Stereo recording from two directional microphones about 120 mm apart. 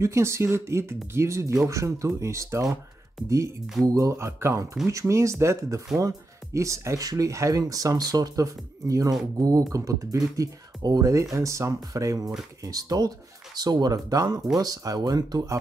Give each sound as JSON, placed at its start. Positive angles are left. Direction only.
{"t": 0.0, "sound": "speech", "side_deg": -25}
{"t": 3.8, "sound": "speech", "side_deg": -30}